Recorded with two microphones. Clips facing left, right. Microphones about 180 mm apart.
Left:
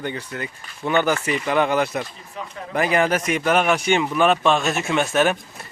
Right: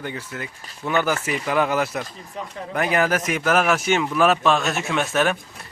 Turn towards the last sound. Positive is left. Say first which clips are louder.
# left 2 dB
turn(degrees=0)  # may be behind; listen again after turning